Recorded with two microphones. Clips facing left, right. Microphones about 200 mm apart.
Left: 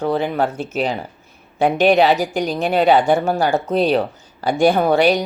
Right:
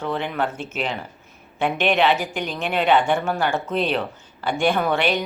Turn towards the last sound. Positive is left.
turn(degrees=35)  # may be behind; listen again after turning